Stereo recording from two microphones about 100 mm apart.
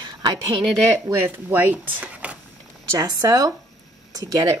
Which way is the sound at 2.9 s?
35° right (ahead or behind).